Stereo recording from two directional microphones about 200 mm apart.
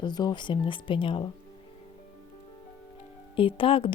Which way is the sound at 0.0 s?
20° left (ahead or behind).